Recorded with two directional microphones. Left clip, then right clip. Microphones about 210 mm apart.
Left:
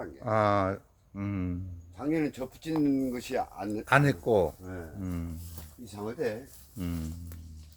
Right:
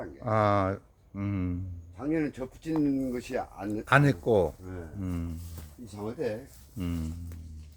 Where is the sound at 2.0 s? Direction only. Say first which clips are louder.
Even; 45° left (ahead or behind).